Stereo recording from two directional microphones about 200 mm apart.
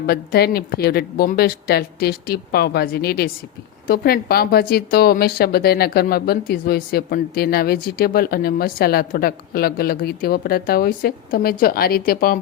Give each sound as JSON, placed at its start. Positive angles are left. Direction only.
{"t": 0.0, "sound": "a woman's voice", "side_deg": 50}